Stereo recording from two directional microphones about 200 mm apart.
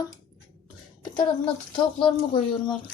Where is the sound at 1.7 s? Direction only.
25° left (ahead or behind).